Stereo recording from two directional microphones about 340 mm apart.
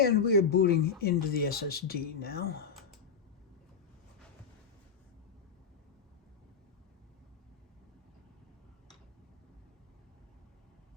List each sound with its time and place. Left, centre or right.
0.0 s speech: left